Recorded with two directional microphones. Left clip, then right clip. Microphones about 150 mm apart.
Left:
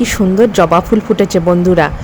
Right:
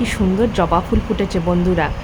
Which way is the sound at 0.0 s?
45° left (ahead or behind).